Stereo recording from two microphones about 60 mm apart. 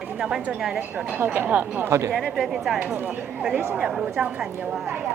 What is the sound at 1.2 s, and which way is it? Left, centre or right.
Speech, right.